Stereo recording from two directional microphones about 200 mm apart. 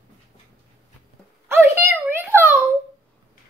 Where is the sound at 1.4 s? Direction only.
10° right (ahead or behind).